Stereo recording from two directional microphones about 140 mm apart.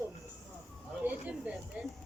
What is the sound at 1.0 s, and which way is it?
Speech, 10° right (ahead or behind).